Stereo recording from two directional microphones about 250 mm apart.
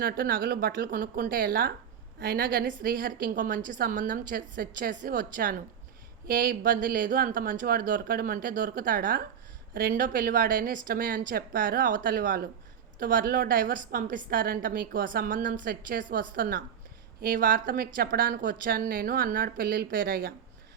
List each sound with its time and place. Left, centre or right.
0.0 s a woman's voice: right